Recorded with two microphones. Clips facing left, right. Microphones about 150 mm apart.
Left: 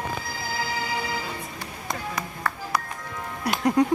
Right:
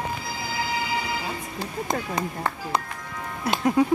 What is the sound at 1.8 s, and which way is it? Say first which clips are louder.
Speech: right 2 dB; 25° right (ahead or behind).